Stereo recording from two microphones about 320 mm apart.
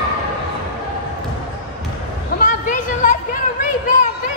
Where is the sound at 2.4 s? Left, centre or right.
Left.